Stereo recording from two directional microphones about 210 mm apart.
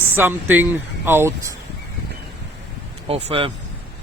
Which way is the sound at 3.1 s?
30° right (ahead or behind).